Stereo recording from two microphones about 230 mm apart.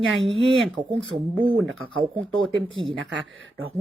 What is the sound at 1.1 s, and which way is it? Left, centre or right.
Speech, centre.